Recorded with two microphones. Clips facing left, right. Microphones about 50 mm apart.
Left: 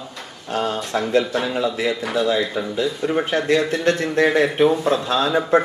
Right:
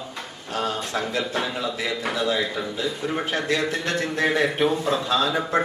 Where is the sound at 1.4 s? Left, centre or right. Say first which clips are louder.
Left 5 dB; centre.